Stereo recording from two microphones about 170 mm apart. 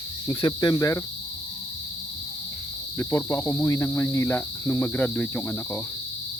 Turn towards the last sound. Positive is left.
turn(degrees=10)  # may be behind; listen again after turning